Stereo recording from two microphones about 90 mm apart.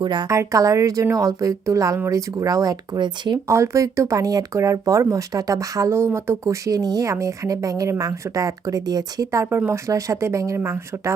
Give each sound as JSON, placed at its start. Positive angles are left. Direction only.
{"t": 0.0, "sound": "speech", "side_deg": -55}
{"t": 0.3, "sound": "speech", "side_deg": -40}
{"t": 3.4, "sound": "speech", "side_deg": -30}